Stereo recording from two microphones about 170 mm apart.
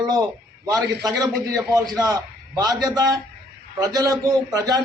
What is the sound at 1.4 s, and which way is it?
A man's voice, 20° right (ahead or behind).